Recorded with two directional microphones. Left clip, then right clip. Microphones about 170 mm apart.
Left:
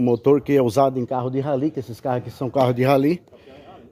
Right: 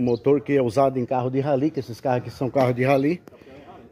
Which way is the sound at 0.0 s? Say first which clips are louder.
Left 3 dB; 25° left (ahead or behind).